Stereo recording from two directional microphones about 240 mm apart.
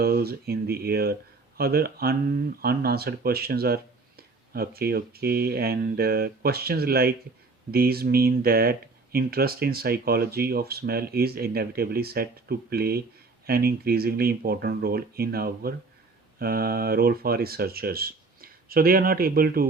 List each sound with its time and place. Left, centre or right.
0.0 s speech: right